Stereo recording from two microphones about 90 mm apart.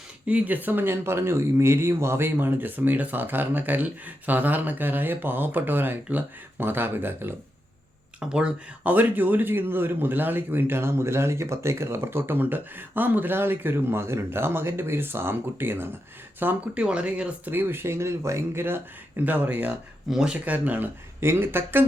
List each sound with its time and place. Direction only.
0.3 s speech: 15° right (ahead or behind)
8.2 s speech: 10° right (ahead or behind)